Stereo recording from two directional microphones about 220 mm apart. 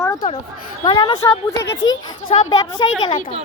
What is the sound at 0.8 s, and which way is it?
Speech, 20° left (ahead or behind).